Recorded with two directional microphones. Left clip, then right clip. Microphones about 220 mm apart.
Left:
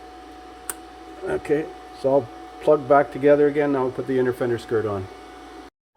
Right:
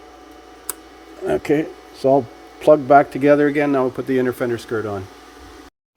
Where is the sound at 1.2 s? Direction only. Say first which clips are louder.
Right 4 dB; 50° right (ahead or behind); by 5.0 s 30° right (ahead or behind).